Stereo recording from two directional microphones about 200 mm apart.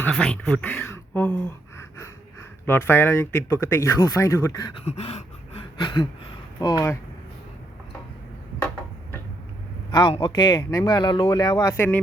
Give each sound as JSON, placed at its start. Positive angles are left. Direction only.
{"t": 0.0, "sound": "speech", "side_deg": 5}
{"t": 2.6, "sound": "speech", "side_deg": 10}
{"t": 4.9, "sound": "a sound", "side_deg": 30}
{"t": 6.6, "sound": "speech", "side_deg": 20}
{"t": 9.9, "sound": "speech", "side_deg": 25}